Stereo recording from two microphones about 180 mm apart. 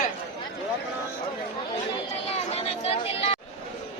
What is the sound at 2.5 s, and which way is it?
Speech, 35° left (ahead or behind).